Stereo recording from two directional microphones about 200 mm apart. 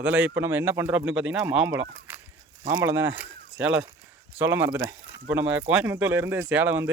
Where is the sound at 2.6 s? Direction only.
15° right (ahead or behind).